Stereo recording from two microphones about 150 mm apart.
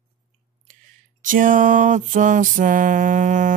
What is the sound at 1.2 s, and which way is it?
Music, 65° right (ahead or behind).